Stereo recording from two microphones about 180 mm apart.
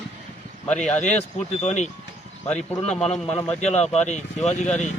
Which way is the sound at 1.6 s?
40° left (ahead or behind).